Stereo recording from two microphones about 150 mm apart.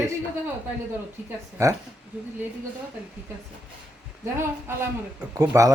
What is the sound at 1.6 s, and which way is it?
Speech, 20° right (ahead or behind).